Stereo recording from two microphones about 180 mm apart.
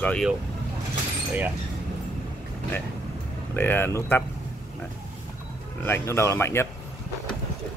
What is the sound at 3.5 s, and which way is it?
Speech, 10° left (ahead or behind).